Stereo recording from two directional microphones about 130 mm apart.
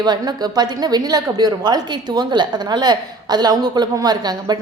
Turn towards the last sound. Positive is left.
turn(degrees=-30)  # may be behind; listen again after turning